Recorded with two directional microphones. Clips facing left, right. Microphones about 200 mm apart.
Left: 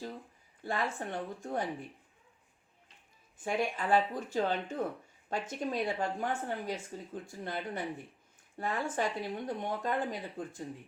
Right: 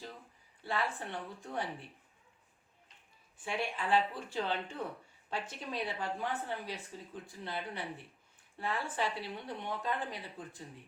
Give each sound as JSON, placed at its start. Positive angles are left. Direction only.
{"t": 0.6, "sound": "speech", "side_deg": 45}
{"t": 3.4, "sound": "speech", "side_deg": 45}